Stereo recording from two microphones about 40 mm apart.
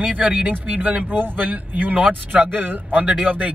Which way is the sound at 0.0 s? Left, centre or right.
Right.